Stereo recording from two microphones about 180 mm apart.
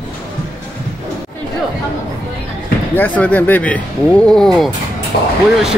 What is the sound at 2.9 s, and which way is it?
Speech, 10° left (ahead or behind).